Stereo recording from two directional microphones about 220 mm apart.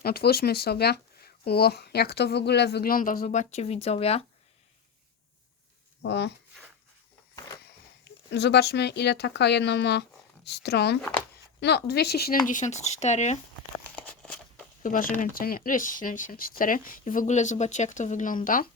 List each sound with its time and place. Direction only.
0.0 s speech: 45° left (ahead or behind); by 4.2 s 25° left (ahead or behind)
6.0 s speech: 50° left (ahead or behind)
8.3 s speech: 50° left (ahead or behind)
12.5 s speech: 35° left (ahead or behind)
13.9 s tearing: 5° left (ahead or behind)
15.1 s speech: 40° left (ahead or behind)